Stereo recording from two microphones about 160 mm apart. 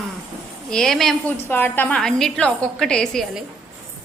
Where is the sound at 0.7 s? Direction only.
5° left (ahead or behind).